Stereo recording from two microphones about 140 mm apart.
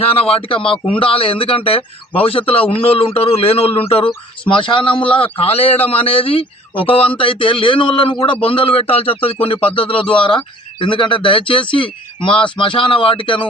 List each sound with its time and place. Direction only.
0.0 s a man's voice: 45° left (ahead or behind)